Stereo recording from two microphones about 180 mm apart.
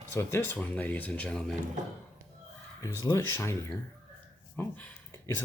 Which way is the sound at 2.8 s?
20° left (ahead or behind).